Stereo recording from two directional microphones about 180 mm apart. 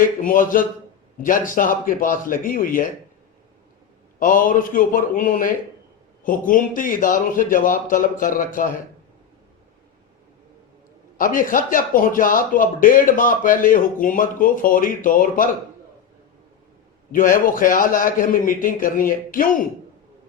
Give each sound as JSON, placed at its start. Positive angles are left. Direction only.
{"t": 0.2, "sound": "speech", "side_deg": 50}
{"t": 4.2, "sound": "speech", "side_deg": 50}
{"t": 11.2, "sound": "speech", "side_deg": 50}
{"t": 17.1, "sound": "speech", "side_deg": 50}